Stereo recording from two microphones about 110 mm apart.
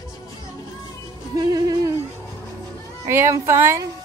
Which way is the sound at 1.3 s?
35° right (ahead or behind).